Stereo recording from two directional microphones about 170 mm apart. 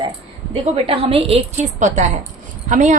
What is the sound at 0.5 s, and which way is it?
A woman's voice, 35° right (ahead or behind).